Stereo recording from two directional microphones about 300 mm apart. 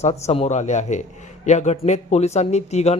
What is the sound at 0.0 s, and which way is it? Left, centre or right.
A man's voice, left.